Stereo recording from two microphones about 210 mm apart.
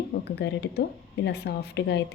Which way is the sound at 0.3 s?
55° left (ahead or behind).